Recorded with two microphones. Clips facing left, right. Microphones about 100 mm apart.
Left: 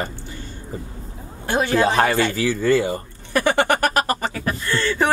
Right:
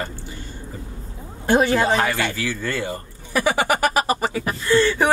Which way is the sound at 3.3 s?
10° right (ahead or behind).